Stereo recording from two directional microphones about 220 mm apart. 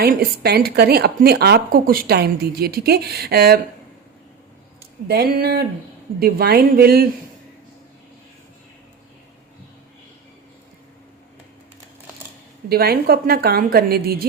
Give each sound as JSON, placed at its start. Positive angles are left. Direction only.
{"t": 0.0, "sound": "a woman's voice", "side_deg": -45}
{"t": 4.8, "sound": "a sound", "side_deg": -45}
{"t": 6.1, "sound": "a woman's voice", "side_deg": -45}
{"t": 12.6, "sound": "a woman's voice", "side_deg": -45}